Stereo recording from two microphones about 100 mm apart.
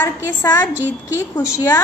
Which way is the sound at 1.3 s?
40° left (ahead or behind).